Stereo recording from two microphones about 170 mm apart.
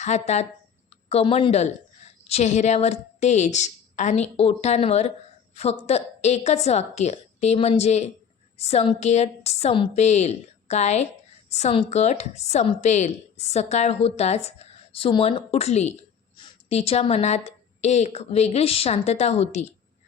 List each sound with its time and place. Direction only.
0.0 s a woman's voice: 40° left (ahead or behind)